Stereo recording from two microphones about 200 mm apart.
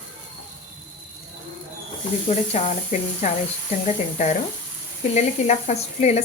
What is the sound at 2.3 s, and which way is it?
Speech, 35° left (ahead or behind).